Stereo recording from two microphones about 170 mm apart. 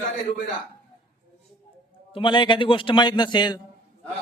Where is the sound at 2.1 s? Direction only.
30° left (ahead or behind).